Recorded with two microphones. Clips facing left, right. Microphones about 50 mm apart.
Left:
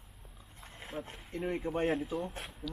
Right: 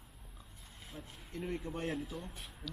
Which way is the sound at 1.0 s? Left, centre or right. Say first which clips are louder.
Left 9 dB; left.